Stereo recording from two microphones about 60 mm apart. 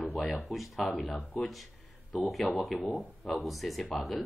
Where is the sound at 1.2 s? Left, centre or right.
Centre.